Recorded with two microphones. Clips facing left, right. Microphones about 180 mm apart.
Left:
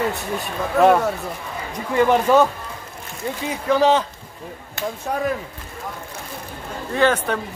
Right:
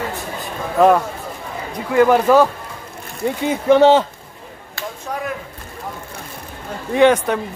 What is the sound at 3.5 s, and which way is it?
Speech, 25° right (ahead or behind).